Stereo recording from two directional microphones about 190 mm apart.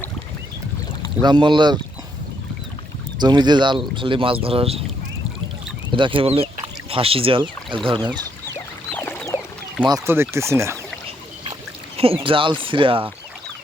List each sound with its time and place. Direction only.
1.2 s speech: 25° right (ahead or behind)
3.2 s speech: 20° right (ahead or behind)
5.9 s speech: 25° right (ahead or behind)
8.9 s a sound: 10° left (ahead or behind)
9.8 s speech: 15° right (ahead or behind)
11.9 s speech: 30° right (ahead or behind)